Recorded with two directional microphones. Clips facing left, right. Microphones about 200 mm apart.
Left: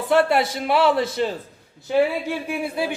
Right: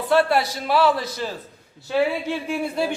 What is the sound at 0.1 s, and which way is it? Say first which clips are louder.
Speech: left 1 dB; 20° left (ahead or behind).